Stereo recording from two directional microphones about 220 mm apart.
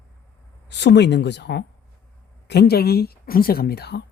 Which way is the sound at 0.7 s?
50° left (ahead or behind).